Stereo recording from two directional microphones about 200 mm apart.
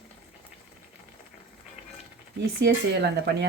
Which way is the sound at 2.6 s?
55° right (ahead or behind).